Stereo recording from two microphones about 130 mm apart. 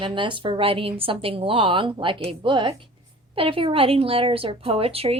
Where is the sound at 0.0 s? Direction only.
40° right (ahead or behind).